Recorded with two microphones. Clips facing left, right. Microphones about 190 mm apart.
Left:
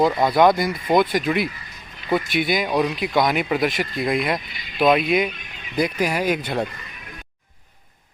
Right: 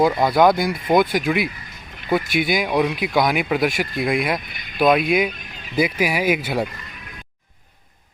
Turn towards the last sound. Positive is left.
turn(degrees=-5)  # may be behind; listen again after turning